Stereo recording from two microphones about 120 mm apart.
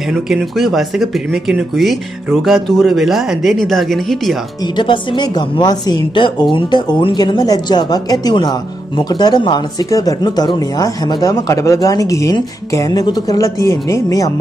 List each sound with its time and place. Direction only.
0.1 s speech: centre (ahead or behind)
4.7 s a woman's voice: 40° left (ahead or behind); by 14.3 s 25° left (ahead or behind)